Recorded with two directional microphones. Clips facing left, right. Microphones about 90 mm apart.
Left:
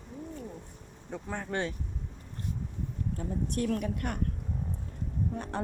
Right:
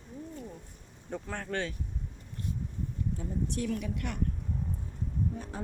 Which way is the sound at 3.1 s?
50° left (ahead or behind).